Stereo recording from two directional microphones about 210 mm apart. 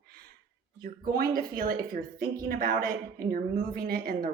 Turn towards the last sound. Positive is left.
turn(degrees=-45)  # may be behind; listen again after turning